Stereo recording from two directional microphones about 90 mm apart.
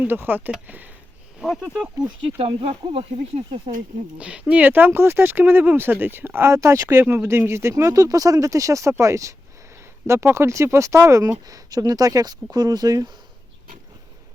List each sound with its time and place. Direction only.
0.0 s speech: 25° right (ahead or behind)
0.7 s a sound: 20° right (ahead or behind)
1.4 s speech: centre (ahead or behind)
2.4 s speech: 90° right
4.2 s speech: 15° right (ahead or behind); by 13.1 s 45° right (ahead or behind)